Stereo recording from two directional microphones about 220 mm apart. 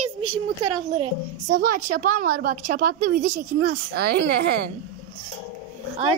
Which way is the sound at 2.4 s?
40° right (ahead or behind).